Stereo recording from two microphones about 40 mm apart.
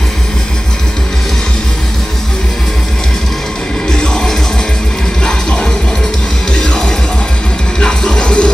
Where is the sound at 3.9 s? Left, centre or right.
Centre.